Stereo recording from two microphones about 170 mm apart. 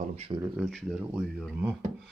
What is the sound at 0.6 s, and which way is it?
Speech, centre (ahead or behind).